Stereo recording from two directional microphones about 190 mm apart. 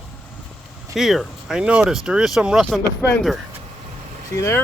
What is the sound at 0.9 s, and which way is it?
Speech, centre (ahead or behind).